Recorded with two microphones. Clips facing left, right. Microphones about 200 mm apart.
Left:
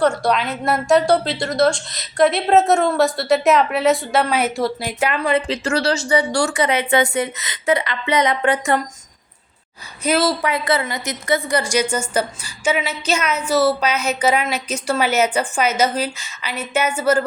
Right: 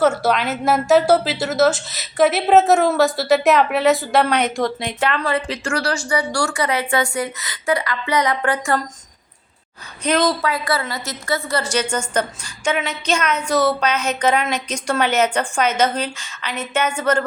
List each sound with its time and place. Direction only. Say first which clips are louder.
0.0 s a woman's voice: right 1 dB; 5° right (ahead or behind)
5.3 s a woman's voice: left 3 dB; 25° left (ahead or behind)
10.0 s a woman's voice: even; 5° left (ahead or behind)
10.5 s a woman's voice: left 2 dB; 20° left (ahead or behind)